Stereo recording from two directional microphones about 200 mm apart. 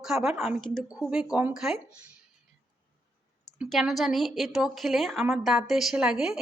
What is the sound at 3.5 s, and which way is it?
Speech, 5° right (ahead or behind).